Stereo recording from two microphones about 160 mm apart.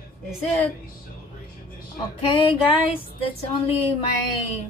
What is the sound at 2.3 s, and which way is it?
Music, 35° left (ahead or behind).